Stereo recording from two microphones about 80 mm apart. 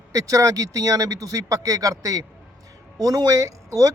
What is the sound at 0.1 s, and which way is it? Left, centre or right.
Speech, right.